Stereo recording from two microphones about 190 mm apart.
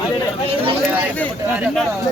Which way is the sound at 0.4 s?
30° right (ahead or behind).